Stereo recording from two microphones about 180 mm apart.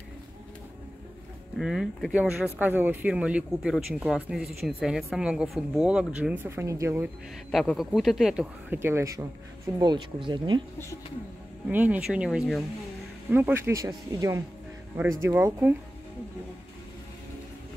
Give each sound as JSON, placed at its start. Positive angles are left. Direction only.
{"t": 1.6, "sound": "a woman's voice", "side_deg": 0}
{"t": 7.5, "sound": "a woman's voice", "side_deg": 0}
{"t": 11.6, "sound": "a woman's voice", "side_deg": -10}
{"t": 13.3, "sound": "speech", "side_deg": -10}